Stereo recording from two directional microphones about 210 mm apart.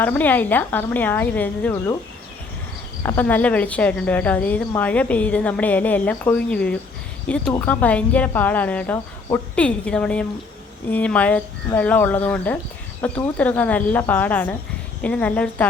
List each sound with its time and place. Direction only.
0.0 s a woman's voice: 10° left (ahead or behind)
3.0 s a woman's voice: 10° left (ahead or behind)